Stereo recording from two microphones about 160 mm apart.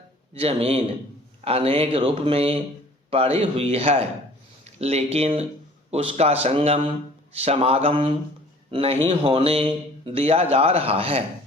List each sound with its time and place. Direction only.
0.3 s speech: 40° right (ahead or behind)
4.6 s a sound: 40° right (ahead or behind)
5.1 s speech: 40° right (ahead or behind)